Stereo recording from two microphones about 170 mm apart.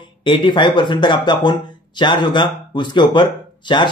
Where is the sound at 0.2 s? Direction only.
25° left (ahead or behind).